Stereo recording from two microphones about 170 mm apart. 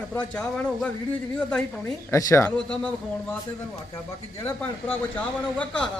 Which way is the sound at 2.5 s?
5° left (ahead or behind).